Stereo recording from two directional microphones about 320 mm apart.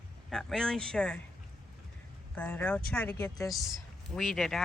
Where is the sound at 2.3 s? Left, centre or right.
Centre.